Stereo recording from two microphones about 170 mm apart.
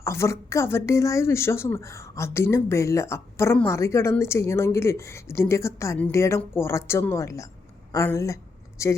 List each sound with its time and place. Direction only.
0.0 s a woman's voice: 15° left (ahead or behind)